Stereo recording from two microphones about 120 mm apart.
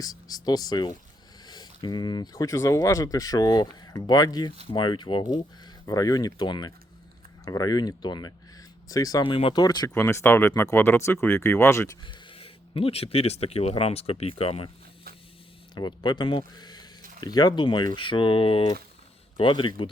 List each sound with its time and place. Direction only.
0.0 s speech: 30° left (ahead or behind)
5.8 s speech: 30° left (ahead or behind)
9.2 s speech: 45° left (ahead or behind)
9.9 s speech: 25° left (ahead or behind)
12.0 s speech: 50° left (ahead or behind)
15.7 s speech: 40° left (ahead or behind)
16.4 s a sound: 35° left (ahead or behind)
17.2 s speech: 35° left (ahead or behind)